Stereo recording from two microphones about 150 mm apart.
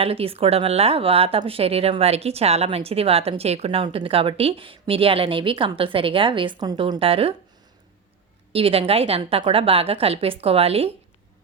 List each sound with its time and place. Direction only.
0.0 s a woman's voice: 40° right (ahead or behind)
8.5 s a woman's voice: 40° right (ahead or behind)